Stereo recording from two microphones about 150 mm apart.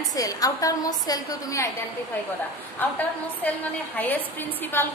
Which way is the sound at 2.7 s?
10° left (ahead or behind).